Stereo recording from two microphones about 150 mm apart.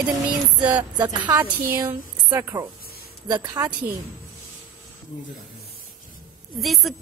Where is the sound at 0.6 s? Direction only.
10° right (ahead or behind).